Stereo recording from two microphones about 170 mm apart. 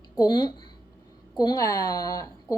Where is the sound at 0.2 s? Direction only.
25° left (ahead or behind).